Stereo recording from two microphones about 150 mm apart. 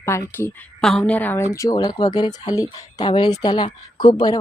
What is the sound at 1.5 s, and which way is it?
Speech, 20° left (ahead or behind).